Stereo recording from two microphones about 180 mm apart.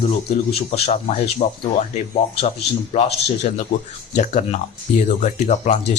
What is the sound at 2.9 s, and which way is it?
Speech, 35° left (ahead or behind).